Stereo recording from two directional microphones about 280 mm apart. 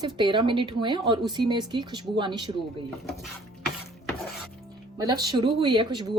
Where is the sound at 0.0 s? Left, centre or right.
Centre.